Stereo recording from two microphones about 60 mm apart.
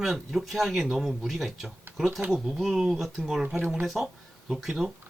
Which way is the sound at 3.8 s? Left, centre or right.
Centre.